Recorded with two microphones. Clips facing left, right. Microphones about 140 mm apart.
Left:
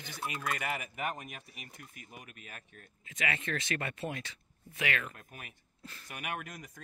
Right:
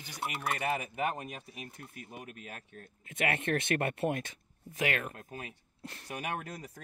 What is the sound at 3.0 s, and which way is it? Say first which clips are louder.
Speech: right 4 dB; 55° right (ahead or behind).